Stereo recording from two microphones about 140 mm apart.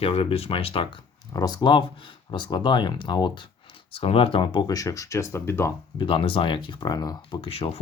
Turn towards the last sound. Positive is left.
turn(degrees=45)  # may be behind; listen again after turning